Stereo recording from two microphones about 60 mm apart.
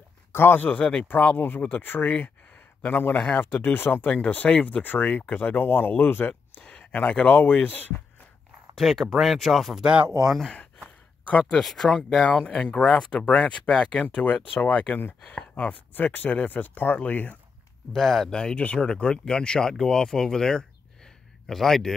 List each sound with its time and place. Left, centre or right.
0.3 s speech: left
1.3 s speech: left
6.6 s speech: centre
8.7 s speech: centre
11.5 s speech: centre; by 13.6 s left
13.7 s speech: centre
14.1 s speech: left
17.9 s speech: centre